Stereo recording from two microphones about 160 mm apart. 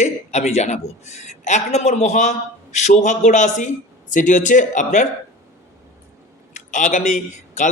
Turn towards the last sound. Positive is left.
turn(degrees=50)  # may be behind; listen again after turning